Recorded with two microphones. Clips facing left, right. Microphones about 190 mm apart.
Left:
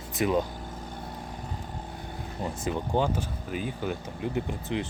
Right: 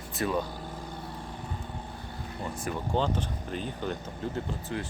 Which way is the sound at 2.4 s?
20° left (ahead or behind).